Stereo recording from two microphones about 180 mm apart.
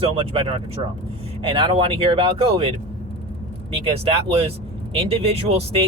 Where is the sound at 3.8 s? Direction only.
30° right (ahead or behind).